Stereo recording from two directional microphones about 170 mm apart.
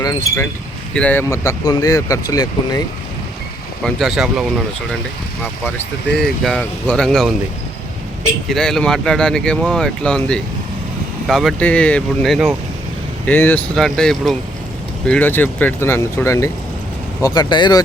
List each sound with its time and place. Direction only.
0.0 s speech: 20° left (ahead or behind)
0.9 s speech: 10° left (ahead or behind)
3.8 s speech: centre (ahead or behind)
6.1 s speech: 5° left (ahead or behind)
8.4 s speech: centre (ahead or behind); by 17.8 s 25° left (ahead or behind)